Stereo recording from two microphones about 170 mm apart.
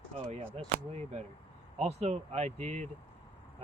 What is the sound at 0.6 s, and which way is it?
Speech, 40° right (ahead or behind).